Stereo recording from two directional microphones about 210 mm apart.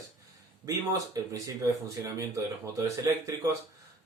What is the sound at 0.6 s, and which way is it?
Speech, 15° right (ahead or behind).